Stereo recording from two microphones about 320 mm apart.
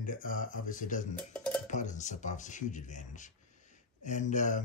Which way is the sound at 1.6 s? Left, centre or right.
Left.